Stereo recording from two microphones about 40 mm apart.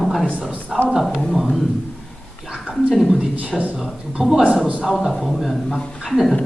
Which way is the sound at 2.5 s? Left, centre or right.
Right.